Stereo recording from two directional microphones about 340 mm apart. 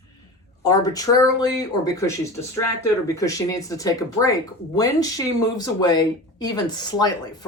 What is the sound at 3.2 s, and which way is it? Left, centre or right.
Speech, centre.